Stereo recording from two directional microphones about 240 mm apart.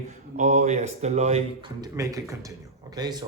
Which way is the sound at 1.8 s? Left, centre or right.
Centre.